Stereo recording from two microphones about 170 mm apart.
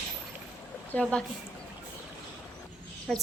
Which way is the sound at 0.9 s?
5° left (ahead or behind).